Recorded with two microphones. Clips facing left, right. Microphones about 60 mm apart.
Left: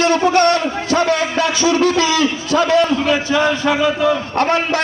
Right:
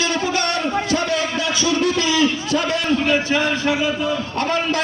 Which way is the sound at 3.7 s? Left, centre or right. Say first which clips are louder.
Left 5 dB; left.